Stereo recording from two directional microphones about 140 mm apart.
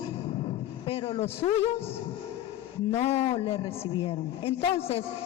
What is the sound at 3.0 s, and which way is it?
Speech, 50° left (ahead or behind).